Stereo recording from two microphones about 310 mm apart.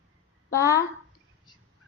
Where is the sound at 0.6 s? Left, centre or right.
Centre.